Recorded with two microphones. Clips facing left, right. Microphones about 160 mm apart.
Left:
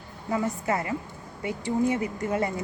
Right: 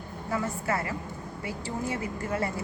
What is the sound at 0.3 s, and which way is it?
Speech, 20° left (ahead or behind).